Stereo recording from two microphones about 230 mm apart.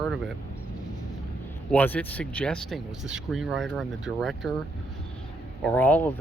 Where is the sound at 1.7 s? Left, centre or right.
Centre.